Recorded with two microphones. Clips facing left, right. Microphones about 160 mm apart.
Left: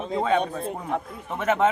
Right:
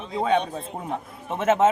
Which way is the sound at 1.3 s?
20° right (ahead or behind).